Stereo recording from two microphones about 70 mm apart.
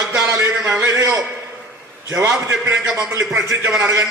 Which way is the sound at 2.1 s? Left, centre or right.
Right.